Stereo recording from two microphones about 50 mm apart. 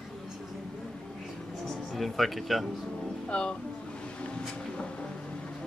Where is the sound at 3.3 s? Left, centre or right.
Centre.